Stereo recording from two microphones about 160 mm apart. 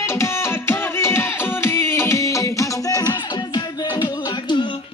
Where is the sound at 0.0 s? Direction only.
15° left (ahead or behind).